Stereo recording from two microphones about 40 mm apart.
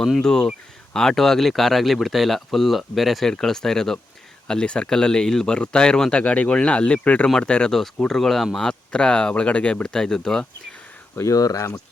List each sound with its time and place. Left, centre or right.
0.2 s speech: centre
3.4 s speech: centre
7.7 s speech: centre
8.5 s speech: left
9.3 s speech: left
9.8 s speech: centre